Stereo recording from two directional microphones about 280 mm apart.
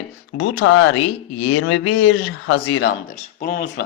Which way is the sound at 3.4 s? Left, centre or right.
Left.